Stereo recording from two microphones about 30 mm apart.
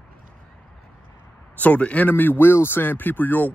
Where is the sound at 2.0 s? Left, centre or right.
Left.